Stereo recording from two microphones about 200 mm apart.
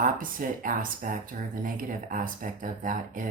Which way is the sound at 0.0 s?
45° right (ahead or behind).